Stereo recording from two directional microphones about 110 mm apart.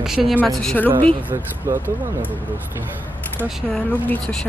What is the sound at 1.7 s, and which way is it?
Speech, 25° right (ahead or behind).